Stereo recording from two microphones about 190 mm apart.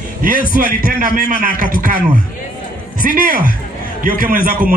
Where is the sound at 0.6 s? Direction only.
45° right (ahead or behind).